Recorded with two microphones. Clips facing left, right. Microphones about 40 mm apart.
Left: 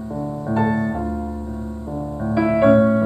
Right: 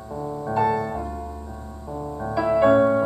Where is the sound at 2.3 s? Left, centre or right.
Centre.